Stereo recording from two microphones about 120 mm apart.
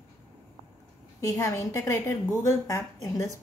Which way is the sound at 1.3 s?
30° left (ahead or behind).